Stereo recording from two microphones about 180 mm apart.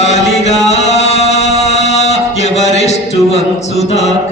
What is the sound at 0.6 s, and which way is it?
Music, 40° left (ahead or behind).